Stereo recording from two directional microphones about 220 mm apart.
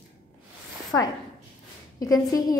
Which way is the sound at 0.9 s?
10° left (ahead or behind).